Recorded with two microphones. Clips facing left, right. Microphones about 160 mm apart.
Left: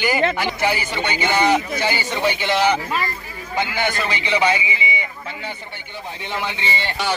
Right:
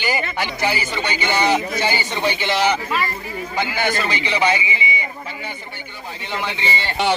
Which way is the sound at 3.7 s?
15° left (ahead or behind).